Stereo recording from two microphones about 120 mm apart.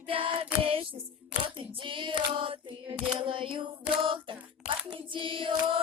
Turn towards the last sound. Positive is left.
turn(degrees=-45)  # may be behind; listen again after turning